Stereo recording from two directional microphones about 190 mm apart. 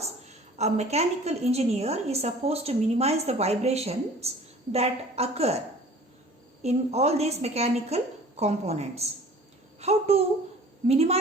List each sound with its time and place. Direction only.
0.0 s a woman's voice: 35° right (ahead or behind)
6.6 s a woman's voice: 35° right (ahead or behind)